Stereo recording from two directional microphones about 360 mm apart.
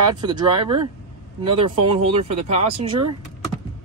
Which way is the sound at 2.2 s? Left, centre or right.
Centre.